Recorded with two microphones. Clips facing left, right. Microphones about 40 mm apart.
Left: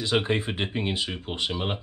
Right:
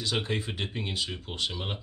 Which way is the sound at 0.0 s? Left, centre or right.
Left.